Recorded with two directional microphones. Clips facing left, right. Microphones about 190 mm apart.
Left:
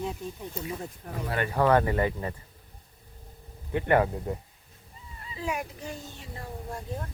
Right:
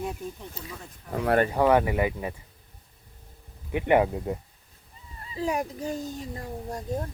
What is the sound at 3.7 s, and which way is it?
Speech, 15° right (ahead or behind).